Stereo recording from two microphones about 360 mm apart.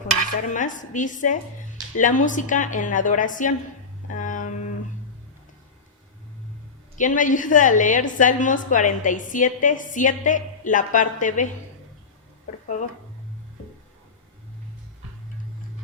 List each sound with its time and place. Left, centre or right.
0.5 s a woman's voice: left
4.1 s a sound: left
6.9 s a woman's voice: left